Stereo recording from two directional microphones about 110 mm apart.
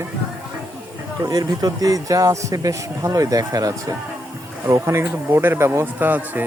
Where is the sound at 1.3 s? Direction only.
40° right (ahead or behind).